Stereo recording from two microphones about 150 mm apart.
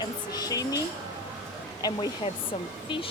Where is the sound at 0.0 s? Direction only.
25° left (ahead or behind).